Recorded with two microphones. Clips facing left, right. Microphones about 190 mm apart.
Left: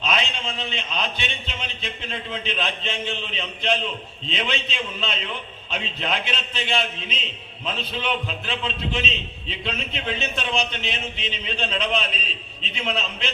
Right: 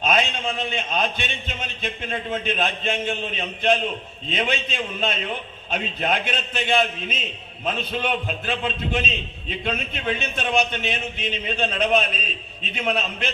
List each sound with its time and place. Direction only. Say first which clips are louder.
0.0 s a man's voice: right 4 dB; 50° right (ahead or behind)